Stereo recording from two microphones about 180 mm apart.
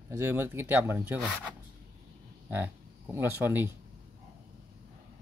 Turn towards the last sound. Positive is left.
turn(degrees=-10)  # may be behind; listen again after turning